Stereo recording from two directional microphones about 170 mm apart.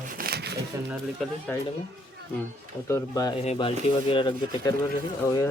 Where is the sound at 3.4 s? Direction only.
35° left (ahead or behind).